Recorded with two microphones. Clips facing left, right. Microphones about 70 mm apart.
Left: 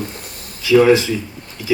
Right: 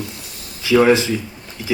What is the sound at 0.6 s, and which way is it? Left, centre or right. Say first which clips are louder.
Speech: left 2 dB; right.